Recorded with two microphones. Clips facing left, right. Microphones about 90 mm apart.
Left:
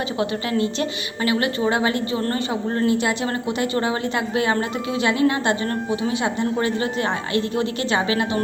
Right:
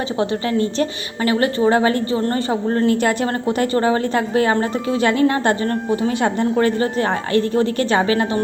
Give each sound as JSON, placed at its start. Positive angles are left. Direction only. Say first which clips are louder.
{"t": 0.2, "sound": "a woman's voice", "louder": "right 3 dB", "side_deg": -35}
{"t": 2.9, "sound": "a woman's voice", "louder": "right 3 dB", "side_deg": -50}